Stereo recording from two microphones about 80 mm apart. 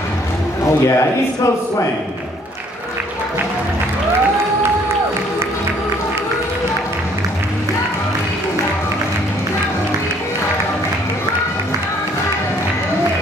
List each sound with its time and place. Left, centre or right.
0.8 s a man's voice: left